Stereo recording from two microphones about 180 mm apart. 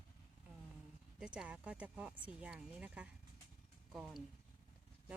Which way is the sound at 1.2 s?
5° right (ahead or behind).